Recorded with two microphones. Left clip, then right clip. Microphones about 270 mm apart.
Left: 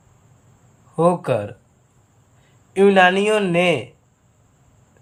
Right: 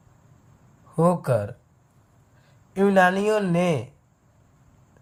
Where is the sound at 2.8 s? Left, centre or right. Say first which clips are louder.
Left 5 dB; right.